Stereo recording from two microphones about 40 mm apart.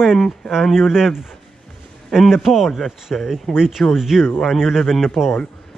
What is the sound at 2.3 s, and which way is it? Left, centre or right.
A man's voice, centre.